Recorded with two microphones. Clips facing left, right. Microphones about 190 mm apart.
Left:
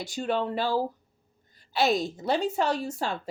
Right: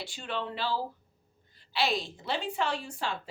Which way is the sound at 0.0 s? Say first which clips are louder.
Left 8 dB; 45° left (ahead or behind).